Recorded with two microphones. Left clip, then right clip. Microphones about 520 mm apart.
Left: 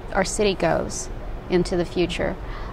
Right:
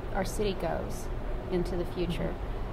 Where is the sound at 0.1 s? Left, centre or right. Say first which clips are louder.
Left 11 dB; left.